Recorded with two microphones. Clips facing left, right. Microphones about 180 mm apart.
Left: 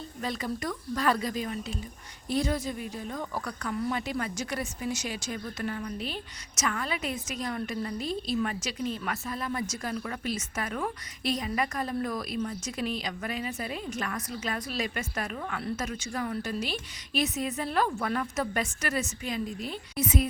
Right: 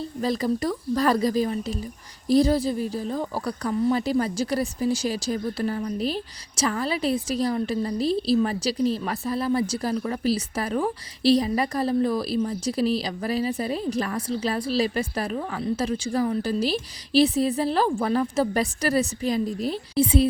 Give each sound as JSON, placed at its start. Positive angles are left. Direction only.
{"t": 0.0, "sound": "a woman's voice", "side_deg": -35}